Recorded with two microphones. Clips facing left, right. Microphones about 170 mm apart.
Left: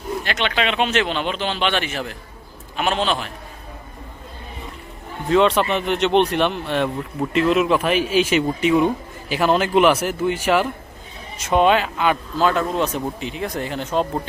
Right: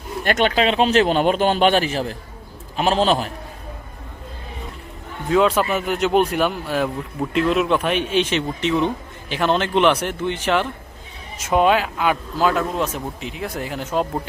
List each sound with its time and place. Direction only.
0.2 s a man's voice: 45° right (ahead or behind)
5.3 s speech: 5° right (ahead or behind)
11.3 s speech: 5° right (ahead or behind)